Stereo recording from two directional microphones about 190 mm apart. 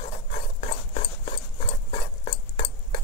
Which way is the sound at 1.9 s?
30° left (ahead or behind).